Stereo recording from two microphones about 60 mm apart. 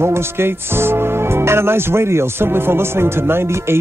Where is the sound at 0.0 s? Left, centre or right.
Right.